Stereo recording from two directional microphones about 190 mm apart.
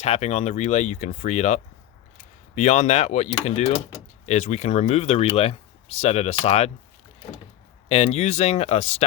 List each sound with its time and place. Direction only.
0.0 s speech: 35° left (ahead or behind)
7.9 s speech: 35° left (ahead or behind)